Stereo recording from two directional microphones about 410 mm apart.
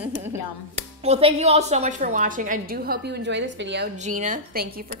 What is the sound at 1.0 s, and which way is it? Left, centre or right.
A woman's voice, centre.